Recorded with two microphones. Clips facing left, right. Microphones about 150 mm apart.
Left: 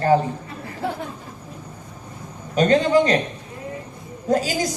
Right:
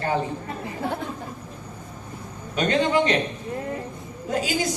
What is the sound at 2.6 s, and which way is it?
Speech, 40° left (ahead or behind).